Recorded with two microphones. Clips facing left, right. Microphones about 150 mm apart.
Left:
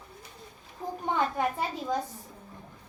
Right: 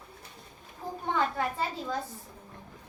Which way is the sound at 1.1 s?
15° left (ahead or behind).